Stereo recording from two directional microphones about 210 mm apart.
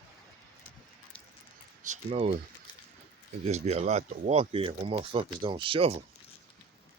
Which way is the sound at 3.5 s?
30° right (ahead or behind).